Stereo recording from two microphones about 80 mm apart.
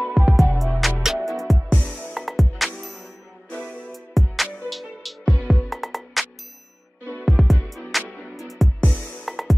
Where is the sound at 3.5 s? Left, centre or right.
Centre.